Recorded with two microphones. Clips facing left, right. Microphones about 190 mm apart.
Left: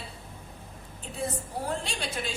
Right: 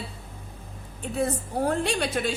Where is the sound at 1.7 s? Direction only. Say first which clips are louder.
Right 9 dB; 60° right (ahead or behind).